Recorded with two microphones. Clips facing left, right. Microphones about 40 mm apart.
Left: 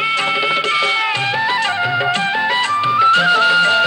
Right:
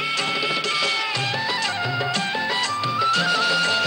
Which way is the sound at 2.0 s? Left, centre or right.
Left.